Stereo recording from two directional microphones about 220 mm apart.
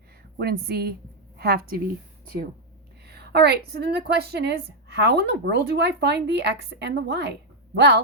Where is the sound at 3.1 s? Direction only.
50° right (ahead or behind).